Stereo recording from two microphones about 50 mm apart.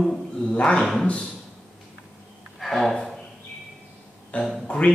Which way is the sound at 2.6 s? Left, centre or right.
Centre.